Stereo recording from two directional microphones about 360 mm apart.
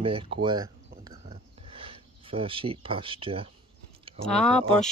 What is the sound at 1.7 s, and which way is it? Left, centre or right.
Speech, centre.